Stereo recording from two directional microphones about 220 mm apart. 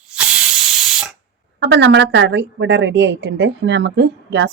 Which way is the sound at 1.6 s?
50° right (ahead or behind).